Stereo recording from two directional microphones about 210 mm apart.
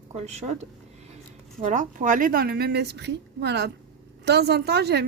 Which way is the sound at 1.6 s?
35° right (ahead or behind).